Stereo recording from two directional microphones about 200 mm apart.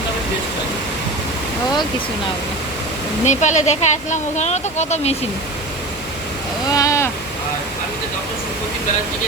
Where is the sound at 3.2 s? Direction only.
35° left (ahead or behind).